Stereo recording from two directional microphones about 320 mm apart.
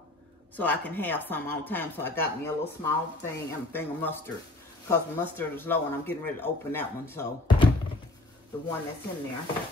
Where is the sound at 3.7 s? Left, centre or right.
Centre.